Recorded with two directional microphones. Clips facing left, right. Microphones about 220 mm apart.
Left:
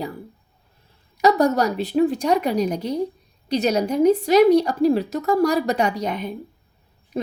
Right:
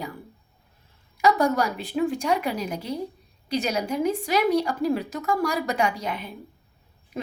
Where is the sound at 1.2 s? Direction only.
40° left (ahead or behind).